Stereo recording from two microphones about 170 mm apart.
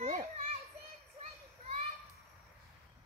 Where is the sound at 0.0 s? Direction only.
45° right (ahead or behind).